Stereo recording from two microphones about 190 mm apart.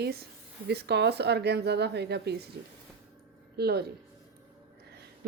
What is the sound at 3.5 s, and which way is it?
Speech, 55° right (ahead or behind).